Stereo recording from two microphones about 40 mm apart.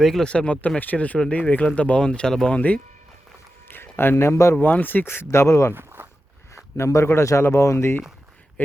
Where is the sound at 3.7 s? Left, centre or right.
Left.